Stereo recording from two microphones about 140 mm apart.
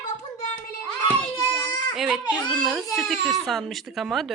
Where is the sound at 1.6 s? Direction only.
30° left (ahead or behind).